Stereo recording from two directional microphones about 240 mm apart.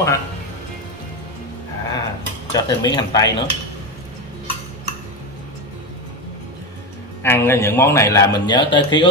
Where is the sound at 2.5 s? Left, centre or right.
Centre.